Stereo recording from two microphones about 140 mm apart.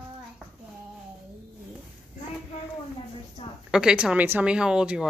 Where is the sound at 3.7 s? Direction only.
5° right (ahead or behind).